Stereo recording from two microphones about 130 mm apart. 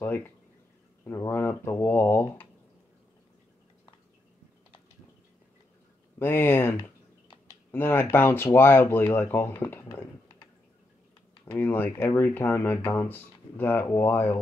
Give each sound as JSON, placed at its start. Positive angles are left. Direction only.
{"t": 0.0, "sound": "speech", "side_deg": 15}
{"t": 6.1, "sound": "speech", "side_deg": 15}
{"t": 9.7, "sound": "computer keyboard", "side_deg": 15}
{"t": 11.4, "sound": "speech", "side_deg": 15}